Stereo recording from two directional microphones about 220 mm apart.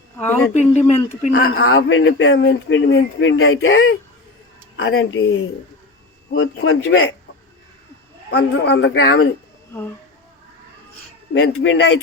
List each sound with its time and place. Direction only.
0.2 s speech: 10° left (ahead or behind)
0.5 s speech: 30° left (ahead or behind)
1.3 s a man's voice: 45° left (ahead or behind)
1.6 s a man's voice: 65° left (ahead or behind)
8.3 s a man's voice: 50° left (ahead or behind)
11.5 s speech: 60° left (ahead or behind)